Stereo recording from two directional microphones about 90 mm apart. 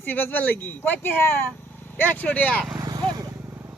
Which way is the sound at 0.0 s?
20° left (ahead or behind).